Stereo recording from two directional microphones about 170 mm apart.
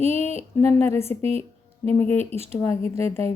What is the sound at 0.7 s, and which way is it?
Speech, 15° left (ahead or behind).